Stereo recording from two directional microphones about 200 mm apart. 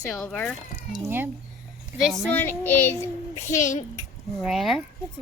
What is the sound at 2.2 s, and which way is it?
Speech, 10° left (ahead or behind).